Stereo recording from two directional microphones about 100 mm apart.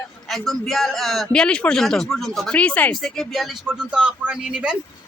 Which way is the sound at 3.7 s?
10° right (ahead or behind).